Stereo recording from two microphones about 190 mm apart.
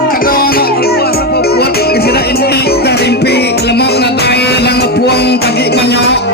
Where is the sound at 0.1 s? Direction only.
50° left (ahead or behind).